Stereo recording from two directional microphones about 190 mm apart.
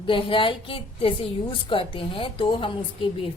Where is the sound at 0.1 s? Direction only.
30° left (ahead or behind).